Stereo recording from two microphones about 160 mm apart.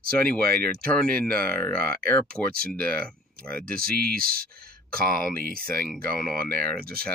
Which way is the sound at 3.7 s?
65° right (ahead or behind).